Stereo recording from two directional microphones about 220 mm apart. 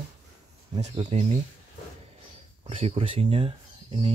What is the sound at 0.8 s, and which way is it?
Speech, 25° right (ahead or behind).